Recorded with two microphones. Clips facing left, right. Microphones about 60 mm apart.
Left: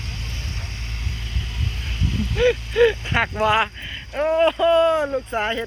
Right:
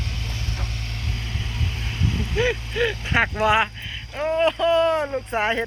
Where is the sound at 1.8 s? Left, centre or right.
Centre.